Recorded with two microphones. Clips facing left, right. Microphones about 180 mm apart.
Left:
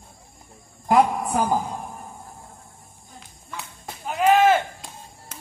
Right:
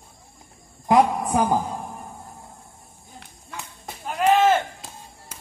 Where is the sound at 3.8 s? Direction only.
5° left (ahead or behind).